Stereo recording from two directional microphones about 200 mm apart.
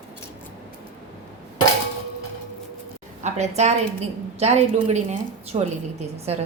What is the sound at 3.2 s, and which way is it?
A woman's voice, 35° right (ahead or behind).